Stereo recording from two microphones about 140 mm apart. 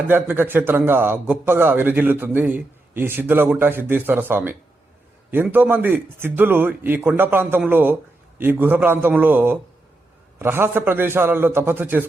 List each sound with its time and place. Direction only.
0.1 s a man's voice: 15° right (ahead or behind)